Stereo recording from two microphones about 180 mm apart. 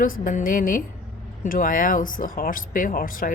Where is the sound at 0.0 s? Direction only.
50° left (ahead or behind).